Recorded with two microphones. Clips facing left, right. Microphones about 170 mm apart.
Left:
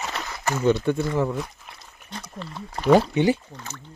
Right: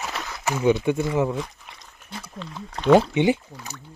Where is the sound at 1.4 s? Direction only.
5° left (ahead or behind).